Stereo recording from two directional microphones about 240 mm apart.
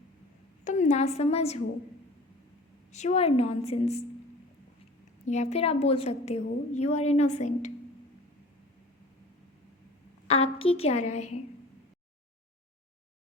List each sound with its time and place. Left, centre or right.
0.6 s a woman's voice: left
2.9 s a woman's voice: left
5.2 s a woman's voice: left
10.2 s a woman's voice: left